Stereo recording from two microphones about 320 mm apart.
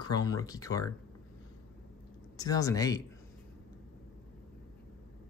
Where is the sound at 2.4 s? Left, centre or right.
Centre.